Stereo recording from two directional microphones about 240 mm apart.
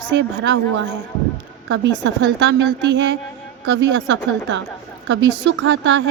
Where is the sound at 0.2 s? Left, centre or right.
Right.